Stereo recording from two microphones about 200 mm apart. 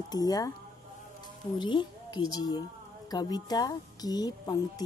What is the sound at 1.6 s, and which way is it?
Speech, 25° left (ahead or behind).